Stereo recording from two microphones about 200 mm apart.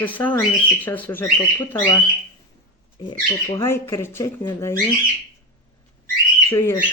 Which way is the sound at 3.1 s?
15° left (ahead or behind).